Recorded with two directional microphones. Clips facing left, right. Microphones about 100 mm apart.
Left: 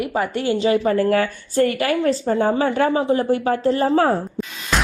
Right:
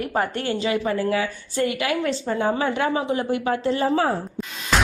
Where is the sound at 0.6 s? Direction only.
30° left (ahead or behind).